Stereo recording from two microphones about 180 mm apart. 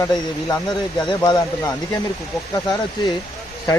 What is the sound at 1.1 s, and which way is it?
Speech, 20° left (ahead or behind).